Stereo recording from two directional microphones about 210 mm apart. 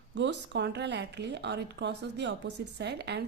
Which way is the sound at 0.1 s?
60° right (ahead or behind).